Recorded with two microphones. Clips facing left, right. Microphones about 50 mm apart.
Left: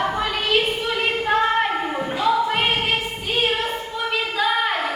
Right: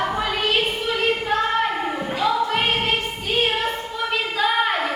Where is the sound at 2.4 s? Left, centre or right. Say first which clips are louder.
Even; centre.